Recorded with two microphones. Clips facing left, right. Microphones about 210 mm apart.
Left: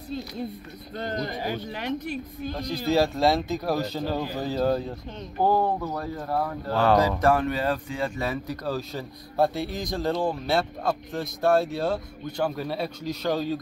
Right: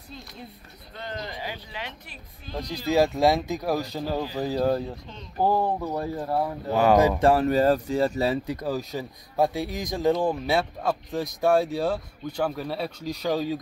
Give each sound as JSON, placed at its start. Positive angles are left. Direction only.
{"t": 0.9, "sound": "speech", "side_deg": 45}
{"t": 2.7, "sound": "speech", "side_deg": -15}
{"t": 6.1, "sound": "speech", "side_deg": -25}
{"t": 6.7, "sound": "speech", "side_deg": -15}
{"t": 8.6, "sound": "speech", "side_deg": -15}